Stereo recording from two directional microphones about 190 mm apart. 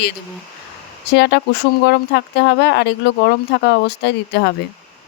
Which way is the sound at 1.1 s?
65° left (ahead or behind).